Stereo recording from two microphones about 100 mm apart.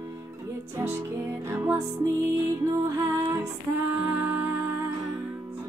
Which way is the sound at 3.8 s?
20° right (ahead or behind).